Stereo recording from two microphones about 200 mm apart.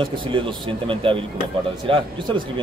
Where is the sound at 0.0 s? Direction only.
25° right (ahead or behind).